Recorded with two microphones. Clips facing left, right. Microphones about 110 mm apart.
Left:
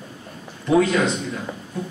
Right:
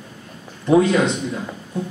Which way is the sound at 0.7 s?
20° right (ahead or behind).